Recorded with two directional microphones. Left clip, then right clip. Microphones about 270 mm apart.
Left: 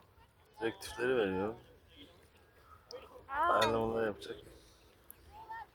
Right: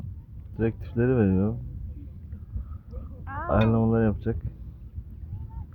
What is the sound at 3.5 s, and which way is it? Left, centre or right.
Speech, centre.